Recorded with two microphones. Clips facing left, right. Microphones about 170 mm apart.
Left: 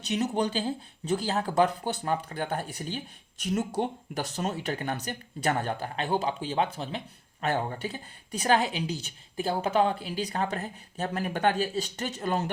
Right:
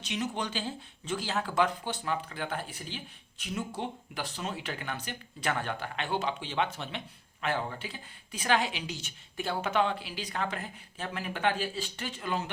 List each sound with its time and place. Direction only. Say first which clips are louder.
0.1 s speech: left 6 dB; 35° left (ahead or behind)